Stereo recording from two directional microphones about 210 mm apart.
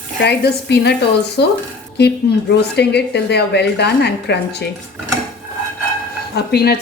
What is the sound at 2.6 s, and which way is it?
A woman's voice, 50° left (ahead or behind).